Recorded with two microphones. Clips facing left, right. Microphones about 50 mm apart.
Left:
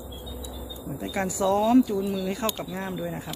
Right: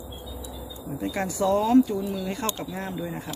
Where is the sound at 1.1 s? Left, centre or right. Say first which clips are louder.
Even; centre.